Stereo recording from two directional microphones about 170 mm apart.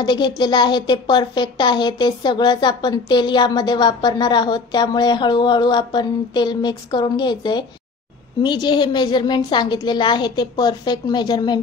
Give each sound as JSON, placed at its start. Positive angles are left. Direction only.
{"t": 0.0, "sound": "a woman's voice", "side_deg": 25}